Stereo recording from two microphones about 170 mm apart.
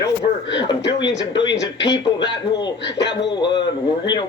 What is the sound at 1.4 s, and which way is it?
Speech, 90° left.